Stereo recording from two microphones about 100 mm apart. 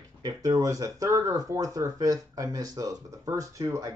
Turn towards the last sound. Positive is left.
turn(degrees=-35)  # may be behind; listen again after turning